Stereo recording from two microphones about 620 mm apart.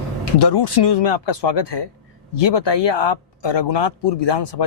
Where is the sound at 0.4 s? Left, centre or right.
Left.